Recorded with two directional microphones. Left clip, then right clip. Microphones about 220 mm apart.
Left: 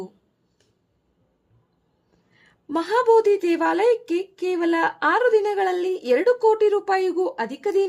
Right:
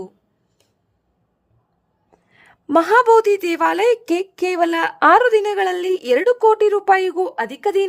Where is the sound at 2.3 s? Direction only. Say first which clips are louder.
Right 10 dB; 50° right (ahead or behind).